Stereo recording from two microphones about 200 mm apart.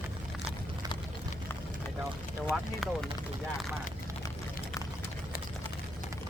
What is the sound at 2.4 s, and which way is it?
Speech, centre (ahead or behind).